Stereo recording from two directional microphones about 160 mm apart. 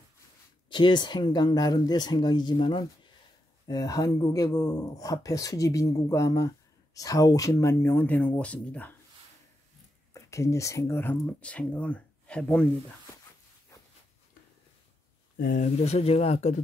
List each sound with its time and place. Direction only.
0.7 s speech: 30° left (ahead or behind); by 8.9 s 10° left (ahead or behind)
10.1 s speech: 20° left (ahead or behind)
15.3 s speech: 60° left (ahead or behind); by 16.6 s 45° left (ahead or behind)